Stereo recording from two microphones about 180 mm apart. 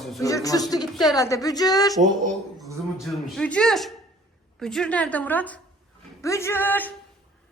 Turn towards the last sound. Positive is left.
turn(degrees=10)  # may be behind; listen again after turning